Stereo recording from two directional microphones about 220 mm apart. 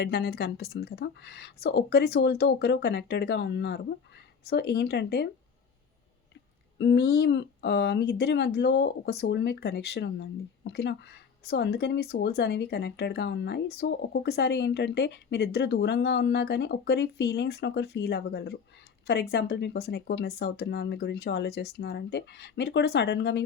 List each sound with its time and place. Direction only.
0.0 s speech: 45° left (ahead or behind)
6.7 s speech: 50° left (ahead or behind)